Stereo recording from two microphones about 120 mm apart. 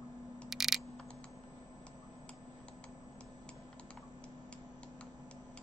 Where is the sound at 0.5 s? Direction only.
Centre (ahead or behind).